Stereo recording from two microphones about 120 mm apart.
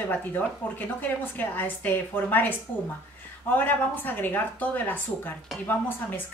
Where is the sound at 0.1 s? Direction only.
15° left (ahead or behind).